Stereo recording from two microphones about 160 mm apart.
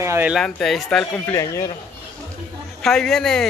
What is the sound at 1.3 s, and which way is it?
Speech, 20° left (ahead or behind).